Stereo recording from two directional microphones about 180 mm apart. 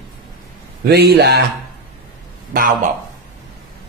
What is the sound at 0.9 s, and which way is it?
Speech, 65° right (ahead or behind).